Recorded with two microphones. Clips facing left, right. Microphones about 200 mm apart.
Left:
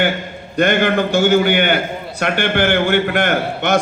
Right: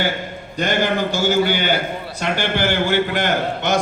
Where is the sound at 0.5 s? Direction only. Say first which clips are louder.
Left 5 dB; 60° left (ahead or behind).